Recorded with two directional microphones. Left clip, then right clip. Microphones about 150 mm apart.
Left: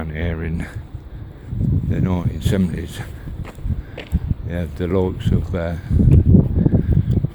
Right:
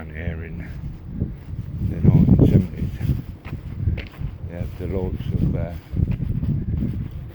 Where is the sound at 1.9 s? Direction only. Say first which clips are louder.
Right 7 dB; 60° left (ahead or behind).